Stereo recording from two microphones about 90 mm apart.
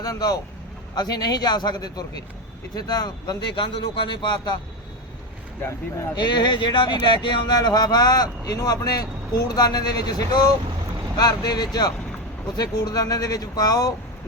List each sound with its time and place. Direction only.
0.0 s speech: 45° left (ahead or behind)
6.1 s speech: 55° left (ahead or behind)